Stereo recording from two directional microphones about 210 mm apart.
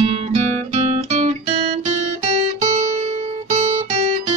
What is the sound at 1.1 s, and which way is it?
Guitar, 35° right (ahead or behind).